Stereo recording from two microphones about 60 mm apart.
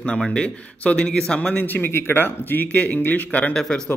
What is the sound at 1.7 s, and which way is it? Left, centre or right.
Speech, left.